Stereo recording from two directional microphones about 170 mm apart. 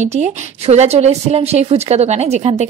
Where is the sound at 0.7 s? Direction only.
40° right (ahead or behind).